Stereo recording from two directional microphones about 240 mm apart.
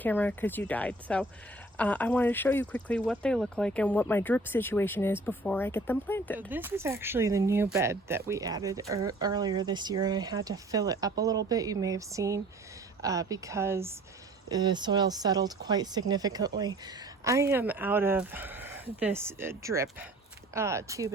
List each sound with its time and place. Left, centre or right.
0.0 s speech: centre
6.5 s speech: centre